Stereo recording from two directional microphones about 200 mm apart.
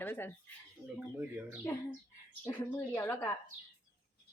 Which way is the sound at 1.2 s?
10° right (ahead or behind).